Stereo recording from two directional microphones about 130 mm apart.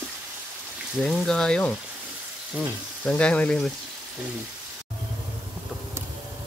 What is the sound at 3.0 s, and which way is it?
Speech, 10° left (ahead or behind).